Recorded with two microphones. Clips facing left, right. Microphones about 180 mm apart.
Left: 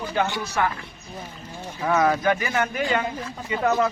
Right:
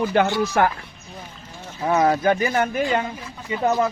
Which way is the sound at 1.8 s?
25° right (ahead or behind).